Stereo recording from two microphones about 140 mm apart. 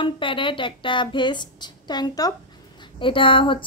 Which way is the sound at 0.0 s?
35° left (ahead or behind).